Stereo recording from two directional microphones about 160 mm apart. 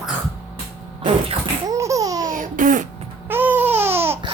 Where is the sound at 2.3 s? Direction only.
55° right (ahead or behind).